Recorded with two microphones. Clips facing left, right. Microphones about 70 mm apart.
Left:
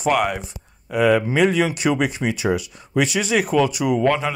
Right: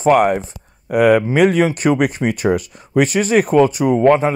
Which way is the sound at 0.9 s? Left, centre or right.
Right.